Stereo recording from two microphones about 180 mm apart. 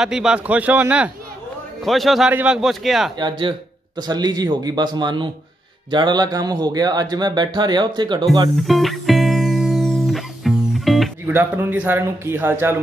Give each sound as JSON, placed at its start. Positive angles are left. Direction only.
{"t": 0.0, "sound": "a man's voice", "side_deg": -5}
{"t": 3.2, "sound": "speech", "side_deg": -25}
{"t": 8.5, "sound": "music", "side_deg": 0}
{"t": 11.3, "sound": "a man's voice", "side_deg": -10}